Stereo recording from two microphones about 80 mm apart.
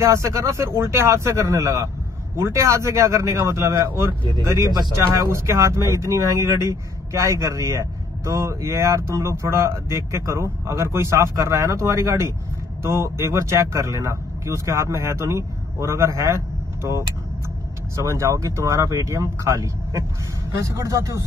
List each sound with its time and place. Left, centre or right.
0.0 s a man's voice: right
5.3 s a man's voice: right